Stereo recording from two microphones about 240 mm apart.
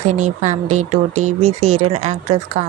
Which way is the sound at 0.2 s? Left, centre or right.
Right.